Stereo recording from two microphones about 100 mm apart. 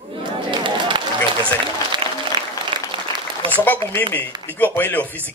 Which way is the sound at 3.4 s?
65° right (ahead or behind).